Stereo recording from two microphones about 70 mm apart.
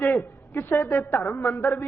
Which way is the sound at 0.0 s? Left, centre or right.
Left.